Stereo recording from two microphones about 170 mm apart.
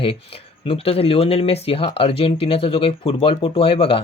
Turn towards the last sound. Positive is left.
turn(degrees=30)  # may be behind; listen again after turning